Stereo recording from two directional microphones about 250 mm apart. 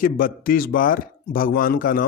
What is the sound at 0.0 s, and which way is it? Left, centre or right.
A man's voice, left.